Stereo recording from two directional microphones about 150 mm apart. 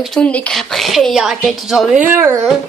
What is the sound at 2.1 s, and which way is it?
Speech, 15° right (ahead or behind).